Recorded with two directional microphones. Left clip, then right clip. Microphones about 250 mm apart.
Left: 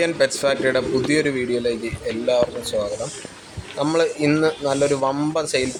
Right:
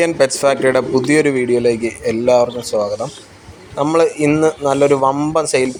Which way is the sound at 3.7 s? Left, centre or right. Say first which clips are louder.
Right 6 dB; centre.